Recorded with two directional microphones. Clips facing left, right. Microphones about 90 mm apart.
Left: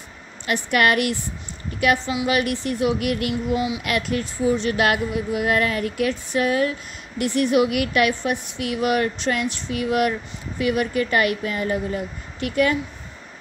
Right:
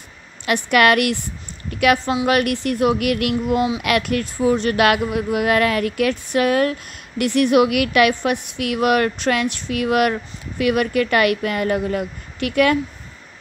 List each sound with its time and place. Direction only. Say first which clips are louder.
0.5 s a woman's voice: right 4 dB; 85° right
2.2 s speech: right 3 dB; 60° right (ahead or behind); by 12.7 s 80° right